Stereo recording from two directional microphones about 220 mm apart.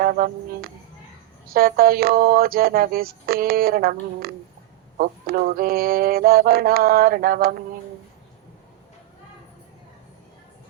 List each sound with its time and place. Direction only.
0.0 s speech: 40° right (ahead or behind)
1.5 s mantra: 40° right (ahead or behind)
4.9 s mantra: 40° right (ahead or behind)